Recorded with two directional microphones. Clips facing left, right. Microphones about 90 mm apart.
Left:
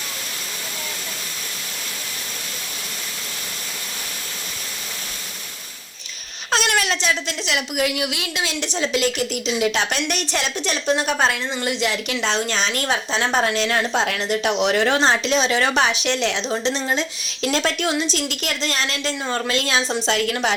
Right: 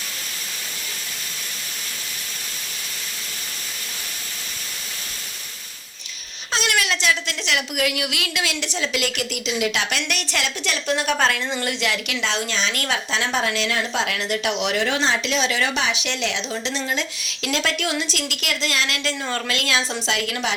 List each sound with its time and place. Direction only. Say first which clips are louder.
6.7 s speech: right 3 dB; 35° left (ahead or behind)
11.2 s a woman's voice: left 1 dB; 15° left (ahead or behind); by 12.8 s 45° left (ahead or behind)
12.8 s a woman's voice: left 2 dB; 30° left (ahead or behind)
20.1 s a woman's voice: left 4 dB; 45° left (ahead or behind)